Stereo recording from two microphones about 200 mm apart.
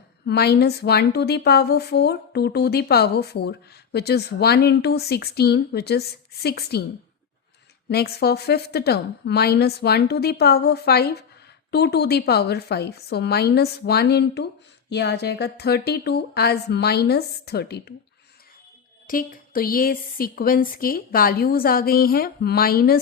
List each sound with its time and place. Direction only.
0.3 s a woman's voice: 55° left (ahead or behind)
7.9 s a woman's voice: 55° left (ahead or behind)
19.0 s a woman's voice: 45° left (ahead or behind)